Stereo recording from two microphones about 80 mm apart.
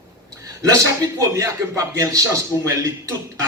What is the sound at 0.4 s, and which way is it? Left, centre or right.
A man's voice, right.